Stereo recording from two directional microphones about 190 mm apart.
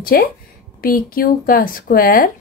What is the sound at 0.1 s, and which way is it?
A woman's voice, 50° left (ahead or behind).